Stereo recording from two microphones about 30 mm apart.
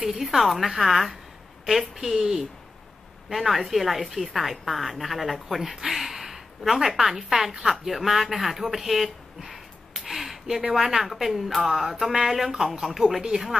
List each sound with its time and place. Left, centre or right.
0.0 s a woman's voice: centre
13.3 s speech: right